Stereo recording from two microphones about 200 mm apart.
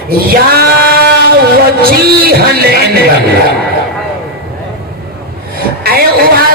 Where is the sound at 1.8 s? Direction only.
50° right (ahead or behind).